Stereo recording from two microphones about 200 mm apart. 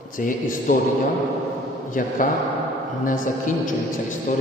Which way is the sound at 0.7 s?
40° left (ahead or behind).